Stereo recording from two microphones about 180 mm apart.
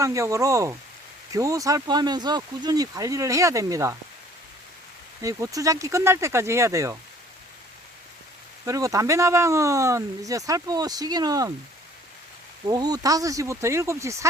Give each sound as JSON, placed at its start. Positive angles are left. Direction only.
{"t": 0.0, "sound": "speech", "side_deg": -15}
{"t": 5.2, "sound": "speech", "side_deg": -20}
{"t": 8.6, "sound": "speech", "side_deg": -20}
{"t": 12.6, "sound": "speech", "side_deg": -20}